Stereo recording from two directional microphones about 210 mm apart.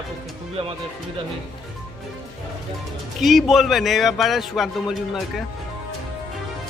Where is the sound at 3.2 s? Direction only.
Centre (ahead or behind).